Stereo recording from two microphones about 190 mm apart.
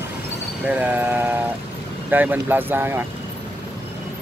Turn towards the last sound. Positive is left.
turn(degrees=-10)  # may be behind; listen again after turning